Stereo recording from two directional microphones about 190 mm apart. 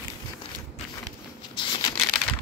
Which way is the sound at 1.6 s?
25° left (ahead or behind).